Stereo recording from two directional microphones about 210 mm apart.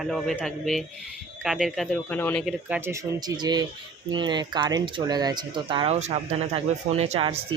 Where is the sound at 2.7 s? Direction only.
10° right (ahead or behind).